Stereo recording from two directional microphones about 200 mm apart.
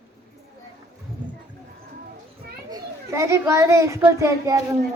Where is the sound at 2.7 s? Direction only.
15° right (ahead or behind).